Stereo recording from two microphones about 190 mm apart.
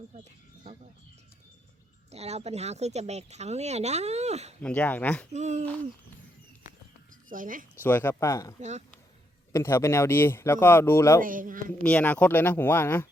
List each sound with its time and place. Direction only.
2.0 s speech: 35° right (ahead or behind)
4.6 s speech: 10° left (ahead or behind)
5.3 s speech: 40° right (ahead or behind)
7.3 s speech: 45° right (ahead or behind)
7.8 s speech: 10° left (ahead or behind)
11.2 s a man's voice: 45° right (ahead or behind)
11.8 s speech: 5° left (ahead or behind)